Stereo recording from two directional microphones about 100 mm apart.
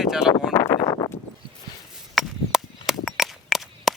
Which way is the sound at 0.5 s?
35° left (ahead or behind).